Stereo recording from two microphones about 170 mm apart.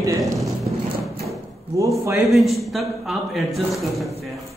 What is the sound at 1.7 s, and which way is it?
Speech, 15° right (ahead or behind).